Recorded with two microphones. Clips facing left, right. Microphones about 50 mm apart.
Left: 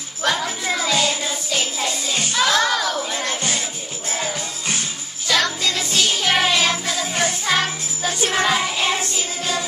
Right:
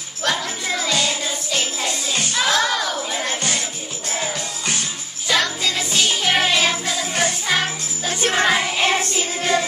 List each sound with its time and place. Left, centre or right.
0.2 s music: centre
2.3 s a sound: centre
5.3 s music: centre
8.1 s music: right
8.5 s music: centre
9.4 s music: right